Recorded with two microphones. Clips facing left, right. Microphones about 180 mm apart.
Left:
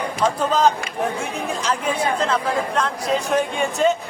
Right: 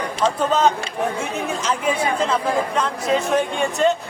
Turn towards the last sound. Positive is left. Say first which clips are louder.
# even
turn(degrees=0)  # may be behind; listen again after turning